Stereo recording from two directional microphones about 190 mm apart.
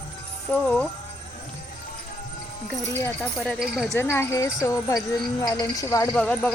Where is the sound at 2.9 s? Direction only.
10° left (ahead or behind).